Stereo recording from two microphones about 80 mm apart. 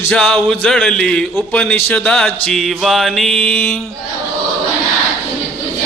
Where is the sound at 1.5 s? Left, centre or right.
Centre.